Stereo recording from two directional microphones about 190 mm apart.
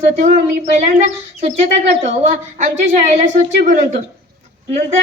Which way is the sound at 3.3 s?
40° right (ahead or behind).